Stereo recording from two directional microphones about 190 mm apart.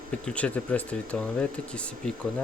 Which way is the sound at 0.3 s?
5° left (ahead or behind).